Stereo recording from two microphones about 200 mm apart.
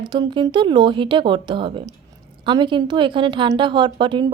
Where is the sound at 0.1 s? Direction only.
20° right (ahead or behind).